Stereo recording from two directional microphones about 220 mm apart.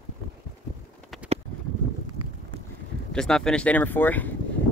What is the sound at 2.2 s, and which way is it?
Wind, 90° right.